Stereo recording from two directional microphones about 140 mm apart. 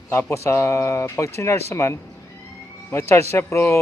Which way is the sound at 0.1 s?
20° left (ahead or behind).